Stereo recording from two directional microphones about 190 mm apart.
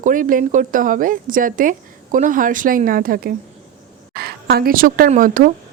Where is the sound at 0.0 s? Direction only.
45° right (ahead or behind).